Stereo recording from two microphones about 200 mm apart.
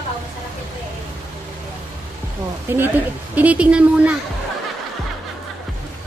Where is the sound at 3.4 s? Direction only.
5° right (ahead or behind).